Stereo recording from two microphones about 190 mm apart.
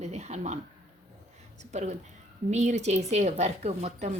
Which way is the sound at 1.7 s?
40° right (ahead or behind).